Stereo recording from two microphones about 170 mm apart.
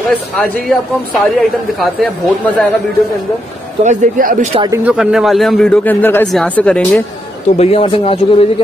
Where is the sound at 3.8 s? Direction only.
55° right (ahead or behind).